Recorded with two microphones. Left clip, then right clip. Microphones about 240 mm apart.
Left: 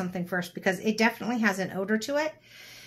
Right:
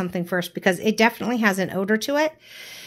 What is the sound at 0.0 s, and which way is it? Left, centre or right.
Speech, right.